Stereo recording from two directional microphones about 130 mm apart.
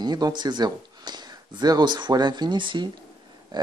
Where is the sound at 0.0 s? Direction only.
30° right (ahead or behind).